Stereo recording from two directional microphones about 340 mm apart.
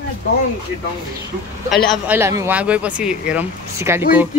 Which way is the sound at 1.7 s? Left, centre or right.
Centre.